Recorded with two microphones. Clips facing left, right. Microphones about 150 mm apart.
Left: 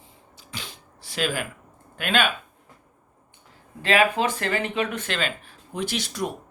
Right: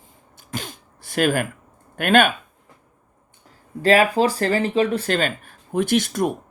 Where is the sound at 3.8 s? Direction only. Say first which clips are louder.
Right 5 dB; 40° right (ahead or behind).